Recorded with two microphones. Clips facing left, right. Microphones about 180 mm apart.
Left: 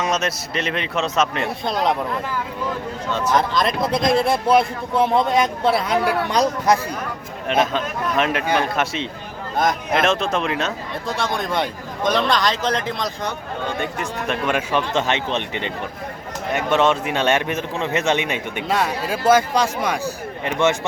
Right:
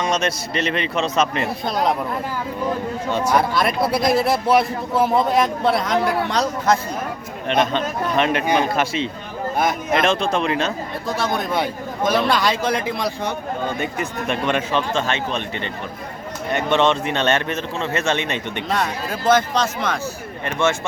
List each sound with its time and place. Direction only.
0.0 s speech: 5° left (ahead or behind)
3.1 s speech: 10° right (ahead or behind); by 6.7 s 15° left (ahead or behind)
7.4 s speech: 5° left (ahead or behind); by 15.7 s 20° left (ahead or behind)
16.5 s a man's voice: 5° left (ahead or behind)